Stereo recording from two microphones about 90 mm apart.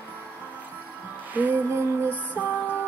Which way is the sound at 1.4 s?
20° right (ahead or behind).